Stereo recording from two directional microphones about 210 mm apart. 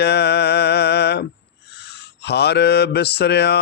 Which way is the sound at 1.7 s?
50° left (ahead or behind).